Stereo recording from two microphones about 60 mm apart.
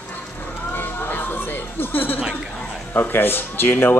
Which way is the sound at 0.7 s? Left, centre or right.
Left.